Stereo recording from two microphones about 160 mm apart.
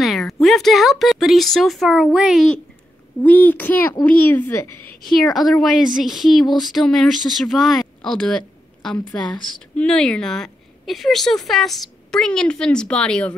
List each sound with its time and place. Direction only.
0.0 s a woman's voice: centre (ahead or behind)
5.0 s speech: centre (ahead or behind)